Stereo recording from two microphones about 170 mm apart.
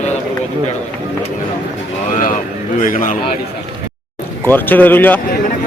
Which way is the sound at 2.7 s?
50° left (ahead or behind).